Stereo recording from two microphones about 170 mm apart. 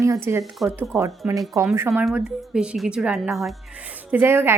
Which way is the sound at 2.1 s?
5° right (ahead or behind).